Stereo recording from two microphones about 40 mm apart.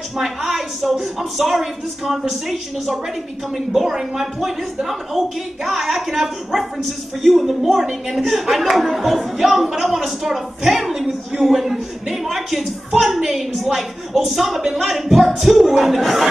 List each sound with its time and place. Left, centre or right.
0.2 s speech: centre
0.8 s speech: centre
3.5 s a woman's voice: centre